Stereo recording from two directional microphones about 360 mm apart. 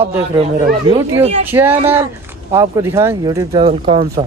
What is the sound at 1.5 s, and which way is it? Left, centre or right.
Speech, centre.